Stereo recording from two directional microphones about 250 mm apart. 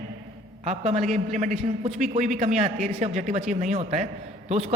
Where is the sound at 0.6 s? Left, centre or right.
Right.